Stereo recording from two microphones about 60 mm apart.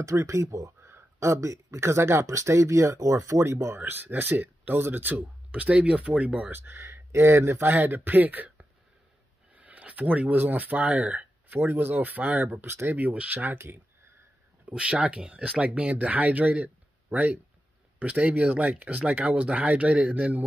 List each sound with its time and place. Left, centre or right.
0.0 s speech: right
0.8 s speech: right
2.2 s speech: right
6.5 s speech: right
6.8 s speech: right
11.4 s speech: right
12.9 s speech: right
14.7 s speech: centre